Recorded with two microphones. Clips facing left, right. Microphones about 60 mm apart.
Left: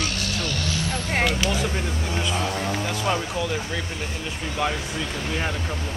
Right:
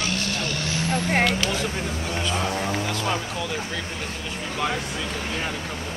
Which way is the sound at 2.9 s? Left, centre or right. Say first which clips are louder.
Left 2 dB; centre.